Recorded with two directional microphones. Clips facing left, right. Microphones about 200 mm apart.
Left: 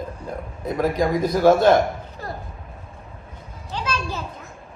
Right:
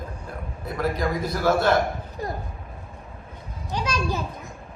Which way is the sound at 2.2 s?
15° right (ahead or behind).